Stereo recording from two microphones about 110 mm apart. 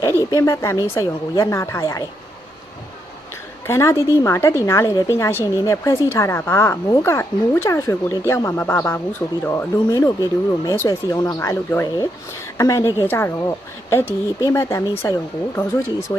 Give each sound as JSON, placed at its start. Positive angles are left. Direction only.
{"t": 0.3, "sound": "speech", "side_deg": 30}
{"t": 3.7, "sound": "speech", "side_deg": 25}